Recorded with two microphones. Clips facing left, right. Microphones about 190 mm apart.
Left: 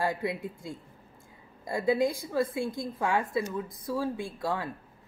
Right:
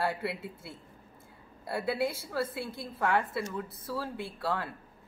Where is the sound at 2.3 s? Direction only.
15° left (ahead or behind).